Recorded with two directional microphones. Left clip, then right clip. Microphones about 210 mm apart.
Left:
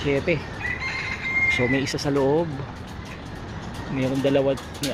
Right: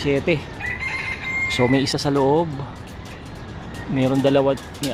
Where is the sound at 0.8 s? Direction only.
50° right (ahead or behind).